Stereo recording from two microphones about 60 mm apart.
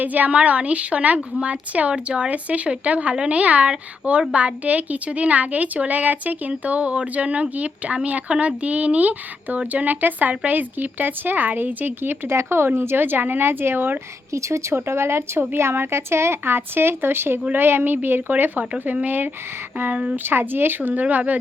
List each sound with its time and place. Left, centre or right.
0.0 s speech: right
12.3 s a woman's voice: right
14.3 s a woman's voice: right
14.8 s a woman's voice: right